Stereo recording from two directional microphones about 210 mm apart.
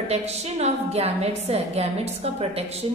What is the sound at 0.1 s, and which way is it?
A woman's voice, 30° right (ahead or behind).